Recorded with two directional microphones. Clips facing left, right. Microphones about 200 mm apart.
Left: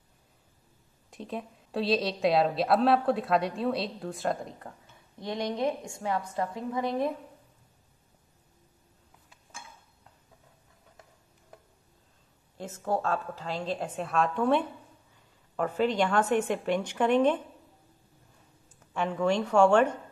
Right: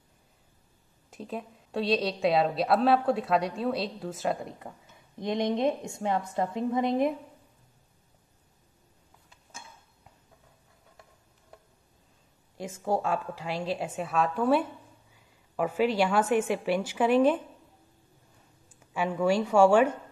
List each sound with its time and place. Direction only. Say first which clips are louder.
1.1 s a woman's voice: even; centre (ahead or behind)
5.2 s a woman's voice: right 3 dB; 20° right (ahead or behind)
12.5 s a woman's voice: right 1 dB; 10° right (ahead or behind)
18.8 s a woman's voice: right 1 dB; 10° right (ahead or behind)